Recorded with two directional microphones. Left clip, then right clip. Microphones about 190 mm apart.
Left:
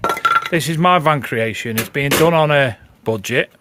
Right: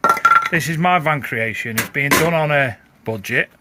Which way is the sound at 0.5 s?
20° left (ahead or behind).